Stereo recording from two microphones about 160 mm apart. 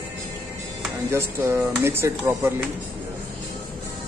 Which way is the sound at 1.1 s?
15° right (ahead or behind).